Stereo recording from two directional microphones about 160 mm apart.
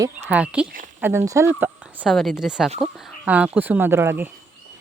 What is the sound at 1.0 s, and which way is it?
Speech, 15° right (ahead or behind).